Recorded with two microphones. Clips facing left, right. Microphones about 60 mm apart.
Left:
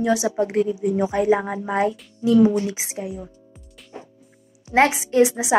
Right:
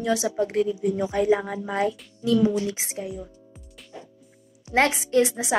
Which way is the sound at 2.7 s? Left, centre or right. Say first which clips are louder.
Left 2 dB; centre.